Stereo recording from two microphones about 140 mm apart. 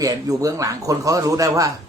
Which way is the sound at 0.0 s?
25° right (ahead or behind).